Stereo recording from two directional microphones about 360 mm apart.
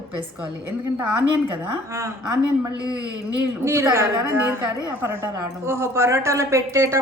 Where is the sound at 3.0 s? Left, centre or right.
Right.